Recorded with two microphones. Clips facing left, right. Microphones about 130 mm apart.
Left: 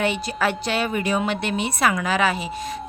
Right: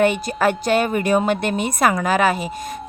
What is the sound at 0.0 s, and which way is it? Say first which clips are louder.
Speech: right 5 dB; 50° right (ahead or behind).